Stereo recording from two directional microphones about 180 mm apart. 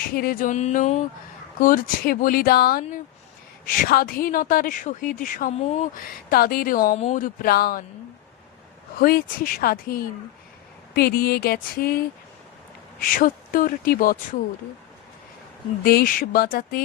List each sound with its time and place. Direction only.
0.1 s speech: 55° left (ahead or behind)
3.8 s speech: 55° left (ahead or behind)
5.5 s speech: 40° left (ahead or behind)
6.3 s speech: 55° left (ahead or behind)
9.0 s speech: 55° left (ahead or behind)
13.0 s speech: 50° left (ahead or behind)
15.8 s speech: 55° left (ahead or behind)